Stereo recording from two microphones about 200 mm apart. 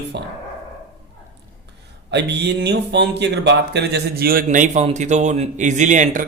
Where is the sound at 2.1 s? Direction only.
60° right (ahead or behind).